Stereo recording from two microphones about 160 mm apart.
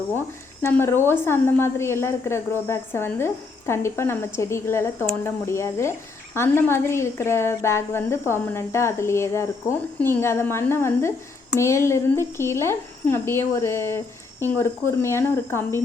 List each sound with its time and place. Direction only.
0.6 s a woman's voice: 15° left (ahead or behind)